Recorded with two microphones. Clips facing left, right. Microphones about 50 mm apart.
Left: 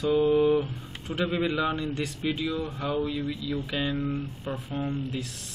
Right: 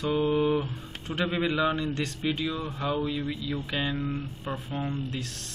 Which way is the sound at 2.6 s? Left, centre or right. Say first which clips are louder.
Even; centre.